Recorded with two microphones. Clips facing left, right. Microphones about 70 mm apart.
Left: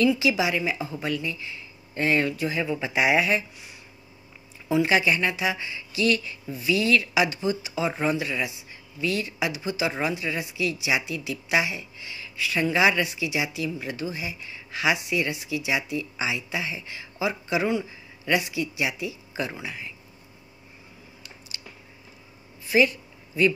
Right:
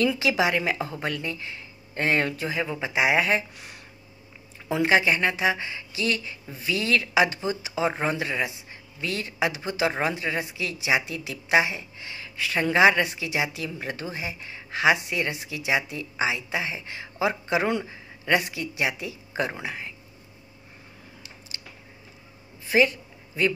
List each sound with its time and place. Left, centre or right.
0.0 s a woman's voice: right
3.2 s speech: right
3.5 s speech: right
4.6 s speech: right
22.7 s a sound: right